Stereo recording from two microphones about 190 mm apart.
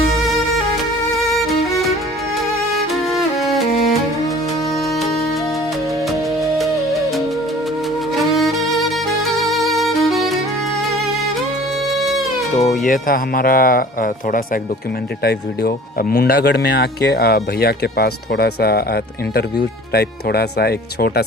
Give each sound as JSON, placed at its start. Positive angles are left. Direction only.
{"t": 3.1, "sound": "music", "side_deg": 0}
{"t": 8.4, "sound": "music", "side_deg": 0}
{"t": 11.9, "sound": "music", "side_deg": 0}
{"t": 12.5, "sound": "speech", "side_deg": 40}
{"t": 19.9, "sound": "speech", "side_deg": 55}